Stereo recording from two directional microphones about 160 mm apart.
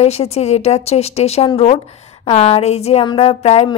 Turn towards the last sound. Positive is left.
turn(degrees=40)  # may be behind; listen again after turning